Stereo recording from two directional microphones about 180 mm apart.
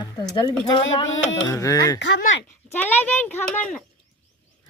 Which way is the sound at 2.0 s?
75° left (ahead or behind).